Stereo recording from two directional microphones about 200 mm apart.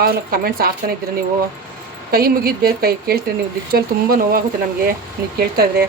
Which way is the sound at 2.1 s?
50° right (ahead or behind).